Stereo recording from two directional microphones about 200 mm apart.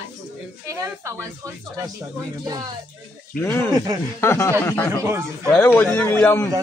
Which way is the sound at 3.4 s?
10° left (ahead or behind).